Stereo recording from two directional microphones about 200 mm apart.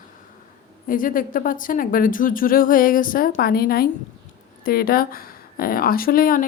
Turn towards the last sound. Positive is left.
turn(degrees=45)  # may be behind; listen again after turning